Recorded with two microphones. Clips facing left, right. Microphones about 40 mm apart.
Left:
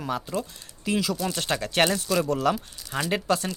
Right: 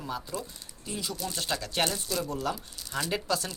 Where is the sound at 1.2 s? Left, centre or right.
Left.